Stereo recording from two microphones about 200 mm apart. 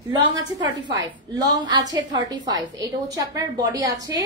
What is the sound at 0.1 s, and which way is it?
A woman's voice, 20° right (ahead or behind).